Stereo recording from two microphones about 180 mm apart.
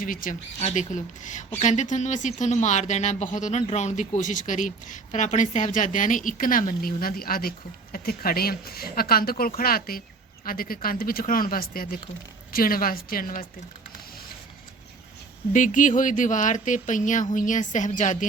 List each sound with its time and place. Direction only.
0.0 s speech: 50° left (ahead or behind)
15.5 s speech: 45° left (ahead or behind)